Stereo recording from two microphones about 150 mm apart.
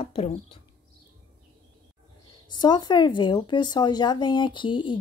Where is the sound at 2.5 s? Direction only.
30° left (ahead or behind).